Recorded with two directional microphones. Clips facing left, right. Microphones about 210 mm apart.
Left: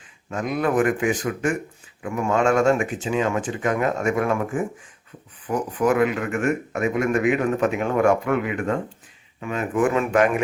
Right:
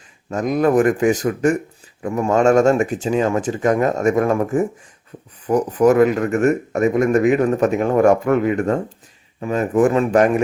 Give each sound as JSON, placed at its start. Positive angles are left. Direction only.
{"t": 0.3, "sound": "speech", "side_deg": -40}